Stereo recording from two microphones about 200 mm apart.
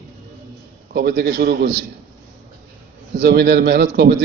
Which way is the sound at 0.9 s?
55° right (ahead or behind).